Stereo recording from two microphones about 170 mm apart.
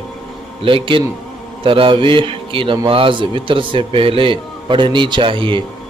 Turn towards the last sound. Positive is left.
turn(degrees=-30)  # may be behind; listen again after turning